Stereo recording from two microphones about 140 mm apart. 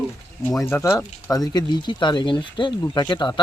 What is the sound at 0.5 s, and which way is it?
Speech, 20° left (ahead or behind).